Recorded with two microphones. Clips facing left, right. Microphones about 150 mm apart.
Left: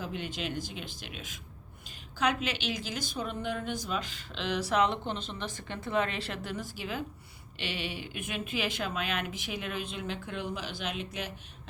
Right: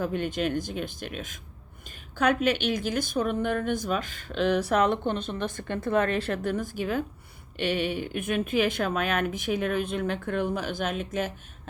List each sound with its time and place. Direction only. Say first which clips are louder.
0.0 s a woman's voice: right 9 dB; 50° right (ahead or behind)